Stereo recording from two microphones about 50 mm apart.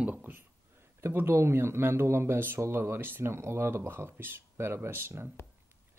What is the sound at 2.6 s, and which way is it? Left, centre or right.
Speech, right.